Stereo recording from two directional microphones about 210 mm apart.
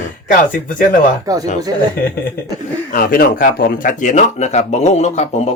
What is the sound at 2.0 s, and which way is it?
A man's voice, 45° left (ahead or behind).